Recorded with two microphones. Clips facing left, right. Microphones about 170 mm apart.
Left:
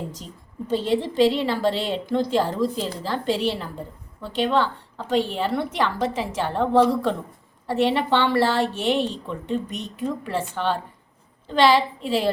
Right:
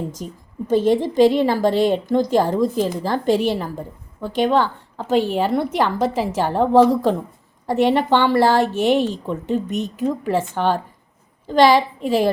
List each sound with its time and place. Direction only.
0.2 s a woman's voice: 55° right (ahead or behind)